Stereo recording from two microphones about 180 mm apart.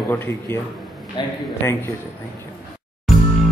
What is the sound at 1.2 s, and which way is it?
Speech, 25° left (ahead or behind).